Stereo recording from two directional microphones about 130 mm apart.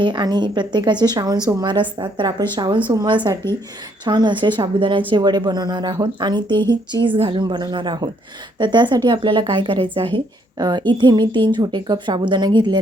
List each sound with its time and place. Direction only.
0.0 s a woman's voice: 35° right (ahead or behind)
3.4 s speech: 20° left (ahead or behind)
4.0 s a woman's voice: 35° right (ahead or behind)